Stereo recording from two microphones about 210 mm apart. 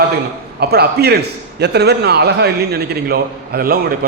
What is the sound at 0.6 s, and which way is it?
A man's voice, 50° right (ahead or behind).